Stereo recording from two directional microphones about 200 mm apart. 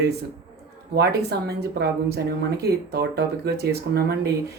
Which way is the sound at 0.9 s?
55° right (ahead or behind).